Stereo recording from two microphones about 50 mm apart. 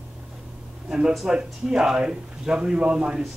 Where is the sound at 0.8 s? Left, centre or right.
Centre.